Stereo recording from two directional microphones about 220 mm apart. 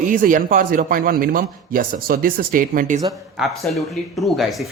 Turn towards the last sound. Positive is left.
turn(degrees=0)  # may be behind; listen again after turning